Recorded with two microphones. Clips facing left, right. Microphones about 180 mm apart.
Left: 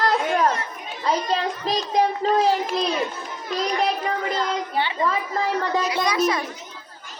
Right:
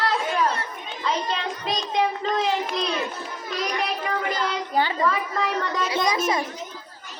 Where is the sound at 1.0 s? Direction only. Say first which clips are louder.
Left 4 dB; 35° left (ahead or behind).